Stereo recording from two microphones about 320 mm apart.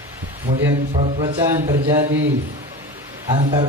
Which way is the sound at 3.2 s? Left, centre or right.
Centre.